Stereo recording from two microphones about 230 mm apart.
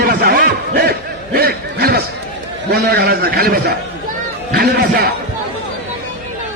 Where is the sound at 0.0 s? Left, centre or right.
Right.